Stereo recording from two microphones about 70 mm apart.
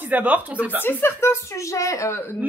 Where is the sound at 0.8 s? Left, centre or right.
Left.